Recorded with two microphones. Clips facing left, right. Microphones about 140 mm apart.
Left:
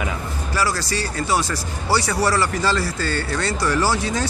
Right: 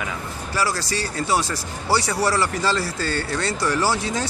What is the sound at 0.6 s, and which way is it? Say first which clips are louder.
Speech: left 1 dB; 25° right (ahead or behind).